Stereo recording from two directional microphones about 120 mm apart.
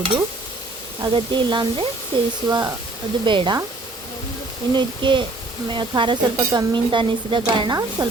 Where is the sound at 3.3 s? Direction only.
40° right (ahead or behind).